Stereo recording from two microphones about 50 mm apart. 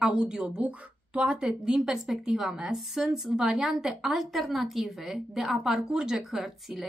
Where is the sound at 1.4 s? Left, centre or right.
Centre.